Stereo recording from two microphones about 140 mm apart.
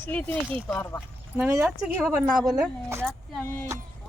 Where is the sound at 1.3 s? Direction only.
15° right (ahead or behind).